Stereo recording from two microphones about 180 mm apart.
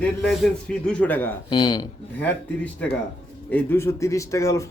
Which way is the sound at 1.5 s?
25° left (ahead or behind).